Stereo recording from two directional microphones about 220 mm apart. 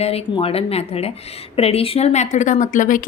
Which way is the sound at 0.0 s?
25° left (ahead or behind).